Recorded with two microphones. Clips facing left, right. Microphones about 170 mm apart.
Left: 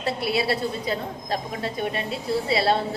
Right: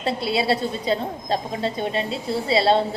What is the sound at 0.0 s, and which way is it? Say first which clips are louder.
A woman's voice: right 2 dB; 25° right (ahead or behind).